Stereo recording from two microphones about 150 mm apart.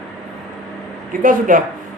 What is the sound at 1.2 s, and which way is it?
Speech, 65° right (ahead or behind).